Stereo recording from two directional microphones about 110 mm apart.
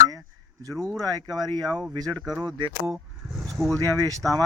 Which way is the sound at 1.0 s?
35° right (ahead or behind).